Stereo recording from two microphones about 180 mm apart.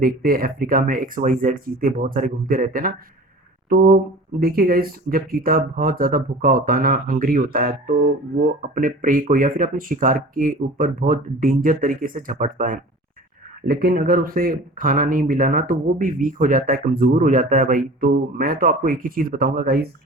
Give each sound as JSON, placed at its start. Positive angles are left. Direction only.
{"t": 0.0, "sound": "speech", "side_deg": -55}